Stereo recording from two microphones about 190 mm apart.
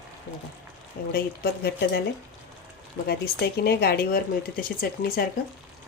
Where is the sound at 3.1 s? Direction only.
55° left (ahead or behind).